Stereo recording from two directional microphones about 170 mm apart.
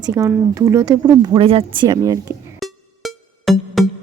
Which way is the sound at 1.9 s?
20° right (ahead or behind).